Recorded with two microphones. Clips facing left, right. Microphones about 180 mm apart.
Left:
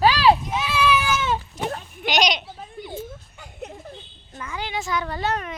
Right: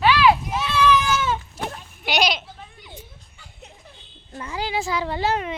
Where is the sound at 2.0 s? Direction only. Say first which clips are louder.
Even; 10° right (ahead or behind).